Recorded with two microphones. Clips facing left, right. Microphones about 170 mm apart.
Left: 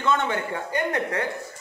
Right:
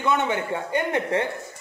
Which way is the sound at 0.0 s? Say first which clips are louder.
Right 1 dB; 20° right (ahead or behind).